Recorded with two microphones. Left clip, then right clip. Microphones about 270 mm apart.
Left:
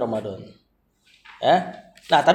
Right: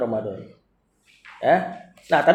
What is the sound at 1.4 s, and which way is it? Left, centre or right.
Speech, left.